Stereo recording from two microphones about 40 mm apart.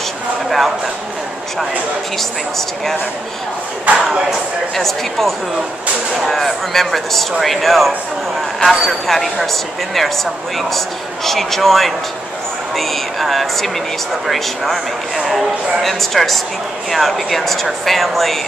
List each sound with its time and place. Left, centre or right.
3.8 s speech: right
4.7 s speech: centre
11.2 s speech: centre